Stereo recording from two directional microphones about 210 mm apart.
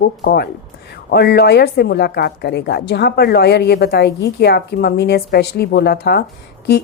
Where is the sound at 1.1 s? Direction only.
50° left (ahead or behind).